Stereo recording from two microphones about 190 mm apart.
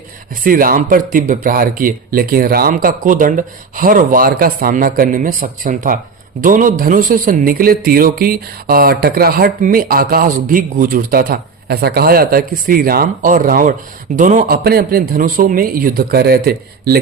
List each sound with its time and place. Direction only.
0.4 s speech: 50° right (ahead or behind)